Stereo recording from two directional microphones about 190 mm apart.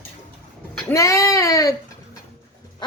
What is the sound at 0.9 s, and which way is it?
Speech, 15° left (ahead or behind).